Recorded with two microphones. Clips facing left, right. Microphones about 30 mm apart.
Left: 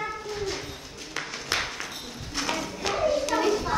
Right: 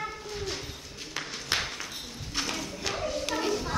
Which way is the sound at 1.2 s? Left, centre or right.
Centre.